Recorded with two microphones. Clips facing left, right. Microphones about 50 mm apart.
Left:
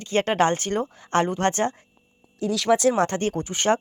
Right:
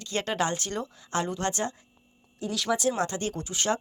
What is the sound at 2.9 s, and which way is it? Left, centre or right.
Speech, left.